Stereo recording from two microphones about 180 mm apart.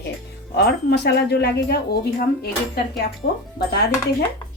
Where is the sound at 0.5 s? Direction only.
65° left (ahead or behind).